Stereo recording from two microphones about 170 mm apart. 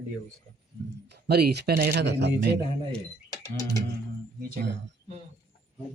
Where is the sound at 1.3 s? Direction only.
70° right (ahead or behind).